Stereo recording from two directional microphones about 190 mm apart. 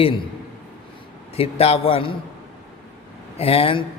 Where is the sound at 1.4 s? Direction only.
30° left (ahead or behind).